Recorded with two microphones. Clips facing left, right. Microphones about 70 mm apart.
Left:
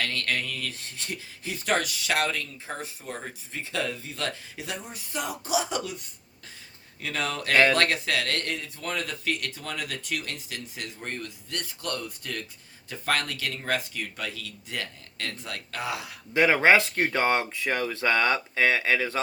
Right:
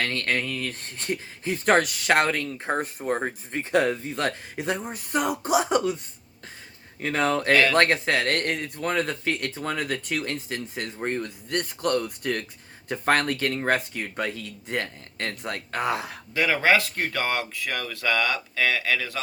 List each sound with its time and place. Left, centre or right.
0.0 s speech: right
7.0 s speech: right
7.5 s speech: left
7.8 s speech: right
11.4 s speech: right
16.3 s speech: left